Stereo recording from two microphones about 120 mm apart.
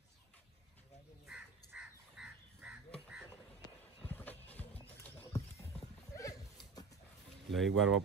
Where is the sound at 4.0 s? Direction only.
15° left (ahead or behind).